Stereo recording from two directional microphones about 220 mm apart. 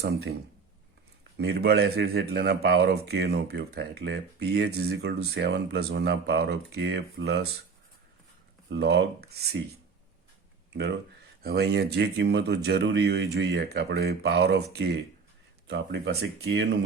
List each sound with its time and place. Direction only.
1.4 s speech: 50° right (ahead or behind)
8.7 s speech: 50° right (ahead or behind)
10.7 s speech: 50° right (ahead or behind)